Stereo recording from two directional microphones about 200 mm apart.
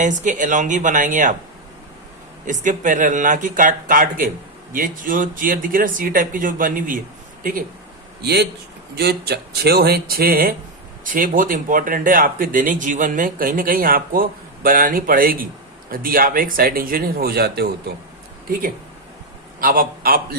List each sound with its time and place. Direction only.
0.0 s speech: 40° right (ahead or behind)
2.5 s speech: 40° right (ahead or behind)
8.2 s a man's voice: 55° right (ahead or behind)